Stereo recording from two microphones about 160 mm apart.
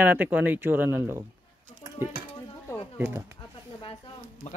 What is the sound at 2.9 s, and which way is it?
Speech, 10° right (ahead or behind).